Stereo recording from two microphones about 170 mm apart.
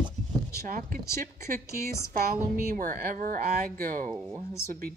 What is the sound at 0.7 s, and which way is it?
Speech, 55° right (ahead or behind).